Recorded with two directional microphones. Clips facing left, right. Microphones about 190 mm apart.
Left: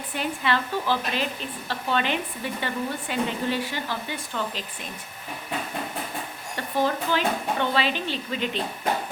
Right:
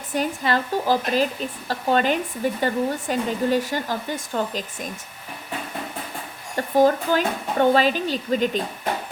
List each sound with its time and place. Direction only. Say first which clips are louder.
0.1 s a woman's voice: right 4 dB; 40° right (ahead or behind)
6.6 s a woman's voice: right 7 dB; 45° right (ahead or behind)